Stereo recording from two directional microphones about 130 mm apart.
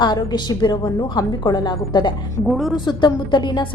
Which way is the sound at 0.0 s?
35° left (ahead or behind).